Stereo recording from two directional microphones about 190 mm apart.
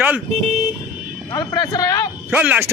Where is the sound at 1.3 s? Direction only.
20° left (ahead or behind).